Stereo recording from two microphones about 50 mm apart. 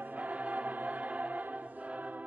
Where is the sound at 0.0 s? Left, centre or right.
Right.